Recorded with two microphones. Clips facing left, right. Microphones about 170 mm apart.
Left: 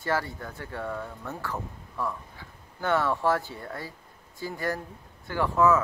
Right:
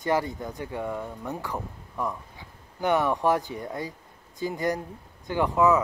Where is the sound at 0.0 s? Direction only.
15° right (ahead or behind).